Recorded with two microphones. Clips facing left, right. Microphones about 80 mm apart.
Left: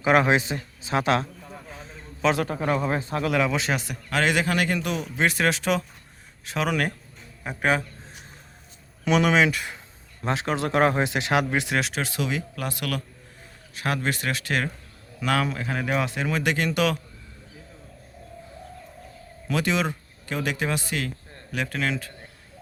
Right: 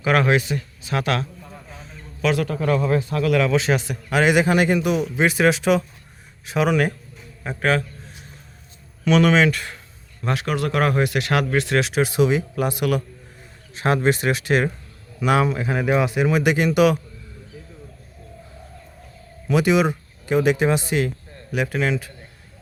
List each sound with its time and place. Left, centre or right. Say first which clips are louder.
0.0 s a man's voice: right 1 dB; left
3.5 s speech: right 6 dB; centre
4.1 s speech: right 6 dB; centre
6.4 s a sound: right 6 dB; centre
7.6 s speech: right 3 dB; centre
9.0 s speech: right 4 dB; centre
10.2 s a man's voice: right 2 dB; left
11.8 s speech: right 7 dB; centre
12.0 s speech: right 9 dB; right
19.5 s speech: right 7 dB; centre